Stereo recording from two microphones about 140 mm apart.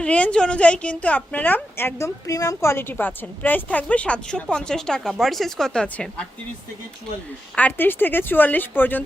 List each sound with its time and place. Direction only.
0.0 s a woman's voice: 10° left (ahead or behind)
7.5 s a woman's voice: 10° left (ahead or behind)